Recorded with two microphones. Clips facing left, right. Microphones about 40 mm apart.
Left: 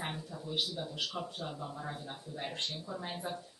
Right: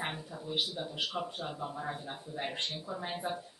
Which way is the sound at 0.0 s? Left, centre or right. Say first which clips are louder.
Right 2 dB; right.